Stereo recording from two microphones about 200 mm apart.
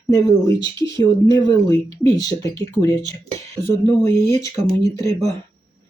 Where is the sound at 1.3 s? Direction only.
20° left (ahead or behind).